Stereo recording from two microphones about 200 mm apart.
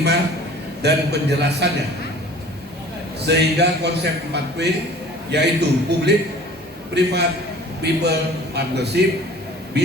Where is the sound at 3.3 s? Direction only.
55° right (ahead or behind).